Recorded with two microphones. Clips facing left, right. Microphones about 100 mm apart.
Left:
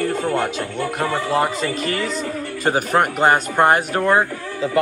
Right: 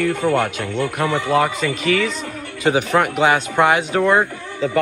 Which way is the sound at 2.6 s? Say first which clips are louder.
Right 1 dB; 40° left (ahead or behind).